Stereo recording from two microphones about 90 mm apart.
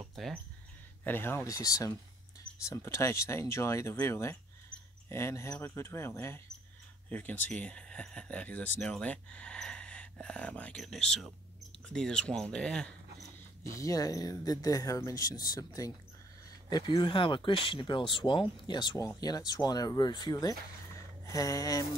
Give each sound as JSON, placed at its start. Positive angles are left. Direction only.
{"t": 0.1, "sound": "a sound", "side_deg": 0}
{"t": 1.0, "sound": "speech", "side_deg": 25}
{"t": 1.5, "sound": "speech", "side_deg": 40}
{"t": 10.8, "sound": "speech", "side_deg": 5}
{"t": 13.7, "sound": "speech", "side_deg": 40}
{"t": 17.0, "sound": "speech", "side_deg": 65}
{"t": 18.9, "sound": "speech", "side_deg": 40}